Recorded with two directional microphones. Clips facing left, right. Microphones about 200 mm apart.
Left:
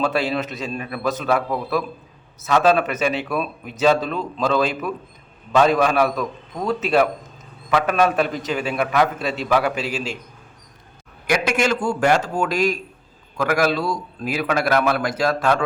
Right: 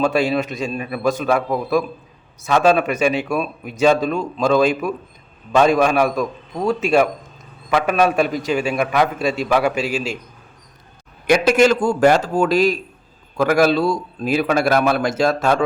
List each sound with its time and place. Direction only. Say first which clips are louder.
0.0 s a man's voice: right 4 dB; 15° right (ahead or behind)
11.4 s a man's voice: right 8 dB; 40° right (ahead or behind)